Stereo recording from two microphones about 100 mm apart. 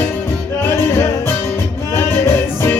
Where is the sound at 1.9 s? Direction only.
25° left (ahead or behind).